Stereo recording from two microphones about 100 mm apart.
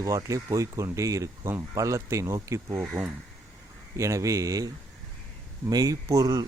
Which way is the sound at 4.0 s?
30° right (ahead or behind).